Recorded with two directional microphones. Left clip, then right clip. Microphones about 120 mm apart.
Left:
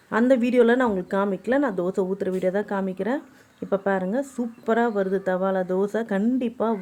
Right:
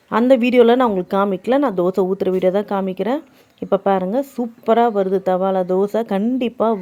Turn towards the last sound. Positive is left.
turn(degrees=-35)  # may be behind; listen again after turning